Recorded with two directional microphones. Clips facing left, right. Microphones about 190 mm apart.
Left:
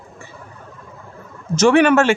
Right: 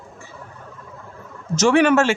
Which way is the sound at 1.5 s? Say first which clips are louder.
Left 2 dB; 60° left (ahead or behind).